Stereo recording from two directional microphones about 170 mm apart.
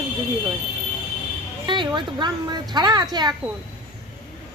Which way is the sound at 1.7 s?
25° right (ahead or behind).